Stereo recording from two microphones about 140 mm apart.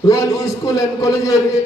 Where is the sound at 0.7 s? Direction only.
25° left (ahead or behind).